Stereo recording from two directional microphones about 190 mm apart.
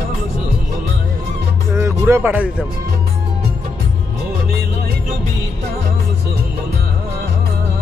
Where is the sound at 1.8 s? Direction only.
15° right (ahead or behind).